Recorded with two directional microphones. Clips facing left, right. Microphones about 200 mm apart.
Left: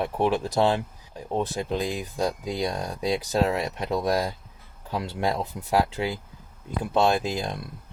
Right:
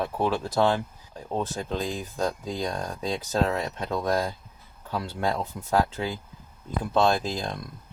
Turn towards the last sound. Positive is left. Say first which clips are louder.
# left 1 dB
turn(degrees=15)  # may be behind; listen again after turning